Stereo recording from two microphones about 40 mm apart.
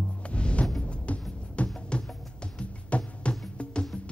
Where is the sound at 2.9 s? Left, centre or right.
Left.